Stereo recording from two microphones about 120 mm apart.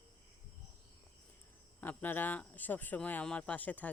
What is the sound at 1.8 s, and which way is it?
Speech, 15° left (ahead or behind).